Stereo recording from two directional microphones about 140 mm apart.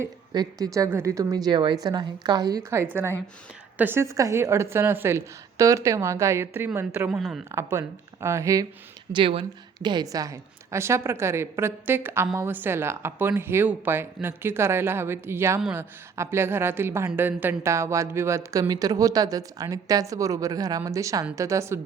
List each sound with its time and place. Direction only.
0.3 s speech: 25° right (ahead or behind)
2.6 s a woman's voice: 15° right (ahead or behind)
7.2 s speech: centre (ahead or behind)
7.5 s speech: 20° right (ahead or behind)
9.1 s a woman's voice: 40° right (ahead or behind); by 21.8 s 20° right (ahead or behind)